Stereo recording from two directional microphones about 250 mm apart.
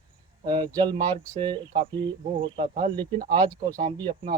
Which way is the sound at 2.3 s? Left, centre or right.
Right.